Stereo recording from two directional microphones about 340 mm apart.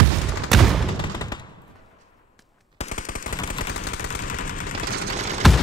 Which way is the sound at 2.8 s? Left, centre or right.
Left.